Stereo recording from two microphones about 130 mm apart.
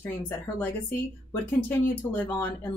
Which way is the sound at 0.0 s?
10° left (ahead or behind).